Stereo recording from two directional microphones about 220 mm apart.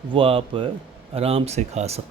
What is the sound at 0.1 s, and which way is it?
Speech, 25° right (ahead or behind).